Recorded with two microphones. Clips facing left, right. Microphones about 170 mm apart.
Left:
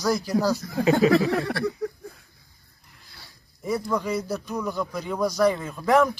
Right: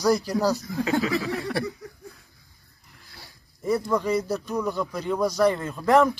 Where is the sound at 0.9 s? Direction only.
60° left (ahead or behind).